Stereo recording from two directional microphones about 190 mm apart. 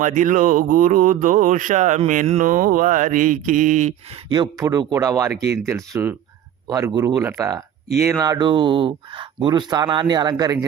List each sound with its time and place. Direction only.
0.0 s speech: 45° right (ahead or behind)
4.3 s speech: 20° right (ahead or behind)